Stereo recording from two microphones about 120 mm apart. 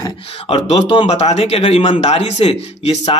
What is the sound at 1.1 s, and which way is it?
Speech, 65° left (ahead or behind).